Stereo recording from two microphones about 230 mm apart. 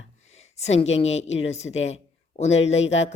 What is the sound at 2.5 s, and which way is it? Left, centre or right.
Speech, left.